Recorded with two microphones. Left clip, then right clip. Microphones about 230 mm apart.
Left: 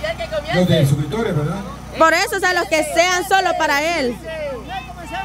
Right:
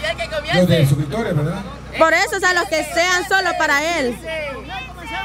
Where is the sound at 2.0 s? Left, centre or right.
Centre.